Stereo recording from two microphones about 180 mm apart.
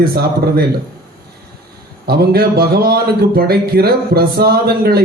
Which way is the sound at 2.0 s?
60° right (ahead or behind).